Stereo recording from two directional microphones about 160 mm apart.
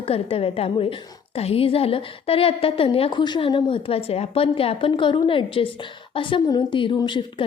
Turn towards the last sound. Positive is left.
turn(degrees=30)  # may be behind; listen again after turning